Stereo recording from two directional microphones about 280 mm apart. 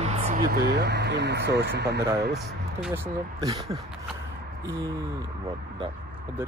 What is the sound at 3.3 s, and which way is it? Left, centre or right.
Speech, centre.